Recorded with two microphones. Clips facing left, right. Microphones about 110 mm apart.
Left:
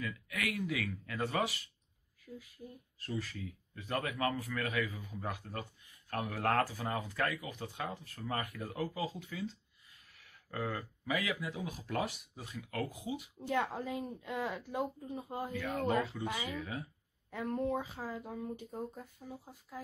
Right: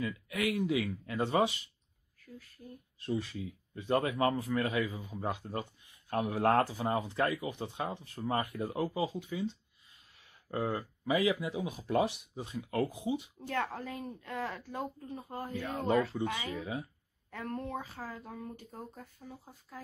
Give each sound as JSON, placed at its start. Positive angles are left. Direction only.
{"t": 0.0, "sound": "speech", "side_deg": -25}
{"t": 2.3, "sound": "speech", "side_deg": 10}
{"t": 3.0, "sound": "speech", "side_deg": -25}
{"t": 13.7, "sound": "speech", "side_deg": 15}
{"t": 15.5, "sound": "speech", "side_deg": -20}
{"t": 17.3, "sound": "speech", "side_deg": 15}